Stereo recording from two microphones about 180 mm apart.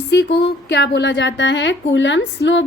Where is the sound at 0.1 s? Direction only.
75° left (ahead or behind).